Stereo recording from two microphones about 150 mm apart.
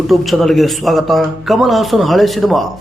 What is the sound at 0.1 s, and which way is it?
A man's voice, centre (ahead or behind).